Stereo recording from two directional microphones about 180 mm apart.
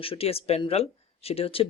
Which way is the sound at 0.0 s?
30° left (ahead or behind).